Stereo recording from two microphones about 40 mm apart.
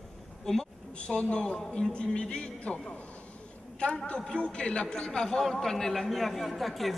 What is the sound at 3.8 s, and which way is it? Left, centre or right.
A man's voice, left.